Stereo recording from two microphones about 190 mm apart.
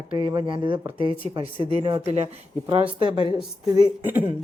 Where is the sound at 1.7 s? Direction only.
25° right (ahead or behind).